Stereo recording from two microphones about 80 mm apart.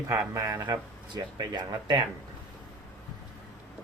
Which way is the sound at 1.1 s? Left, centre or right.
Right.